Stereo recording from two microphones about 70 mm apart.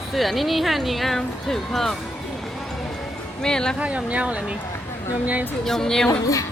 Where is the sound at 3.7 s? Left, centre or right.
Centre.